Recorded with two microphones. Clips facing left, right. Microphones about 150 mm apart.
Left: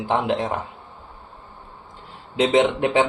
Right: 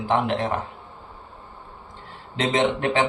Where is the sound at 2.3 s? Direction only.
15° left (ahead or behind).